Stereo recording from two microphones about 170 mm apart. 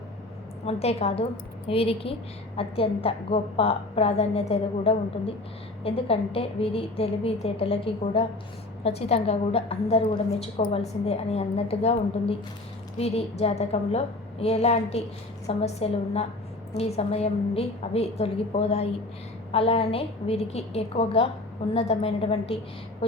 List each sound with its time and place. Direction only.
0.6 s a woman's voice: 35° left (ahead or behind)